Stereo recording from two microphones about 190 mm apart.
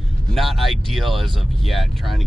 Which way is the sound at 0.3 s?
Centre (ahead or behind).